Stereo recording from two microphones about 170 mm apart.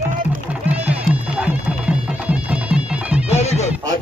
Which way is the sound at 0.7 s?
10° right (ahead or behind).